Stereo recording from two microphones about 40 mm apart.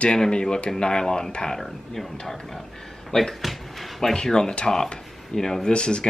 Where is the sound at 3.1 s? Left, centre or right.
Centre.